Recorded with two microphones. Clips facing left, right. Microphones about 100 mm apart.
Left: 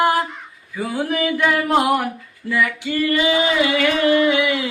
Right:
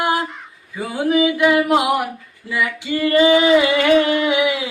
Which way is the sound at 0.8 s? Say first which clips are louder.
Right 4 dB; 20° right (ahead or behind).